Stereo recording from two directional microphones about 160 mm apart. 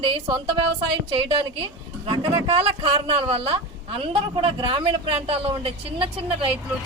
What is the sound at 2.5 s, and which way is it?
A woman's voice, 35° right (ahead or behind).